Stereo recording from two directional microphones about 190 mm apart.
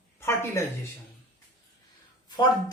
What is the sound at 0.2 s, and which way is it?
Speech, 15° left (ahead or behind).